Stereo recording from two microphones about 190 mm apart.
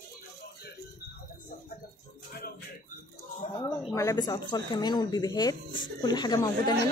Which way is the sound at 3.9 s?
15° left (ahead or behind).